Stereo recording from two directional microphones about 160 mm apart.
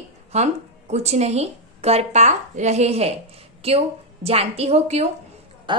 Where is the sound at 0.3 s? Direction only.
45° right (ahead or behind).